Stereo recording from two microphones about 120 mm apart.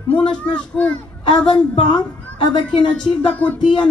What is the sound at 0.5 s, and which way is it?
Speech, 10° left (ahead or behind).